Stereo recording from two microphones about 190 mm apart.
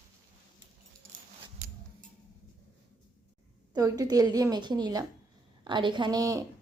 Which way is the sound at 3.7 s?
20° right (ahead or behind).